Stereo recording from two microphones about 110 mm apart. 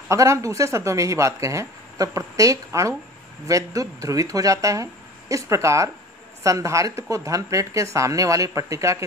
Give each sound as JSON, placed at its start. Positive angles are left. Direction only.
{"t": 0.1, "sound": "speech", "side_deg": -30}